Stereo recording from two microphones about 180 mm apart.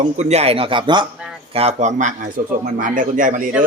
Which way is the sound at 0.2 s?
35° right (ahead or behind).